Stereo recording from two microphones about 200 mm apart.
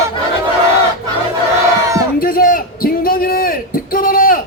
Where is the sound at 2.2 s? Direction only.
45° left (ahead or behind).